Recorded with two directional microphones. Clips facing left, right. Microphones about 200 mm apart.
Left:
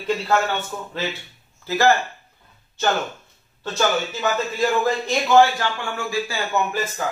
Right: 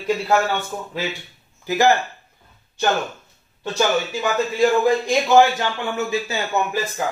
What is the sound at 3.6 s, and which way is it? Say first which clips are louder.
A man's voice: right 2 dB; 15° right (ahead or behind).